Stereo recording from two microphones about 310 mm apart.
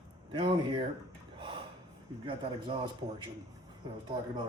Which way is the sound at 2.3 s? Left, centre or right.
Centre.